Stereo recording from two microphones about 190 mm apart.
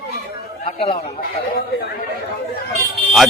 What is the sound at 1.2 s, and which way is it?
Speech, 50° left (ahead or behind).